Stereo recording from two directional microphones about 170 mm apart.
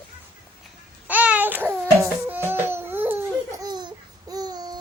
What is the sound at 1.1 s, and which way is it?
Baby cry, 10° right (ahead or behind).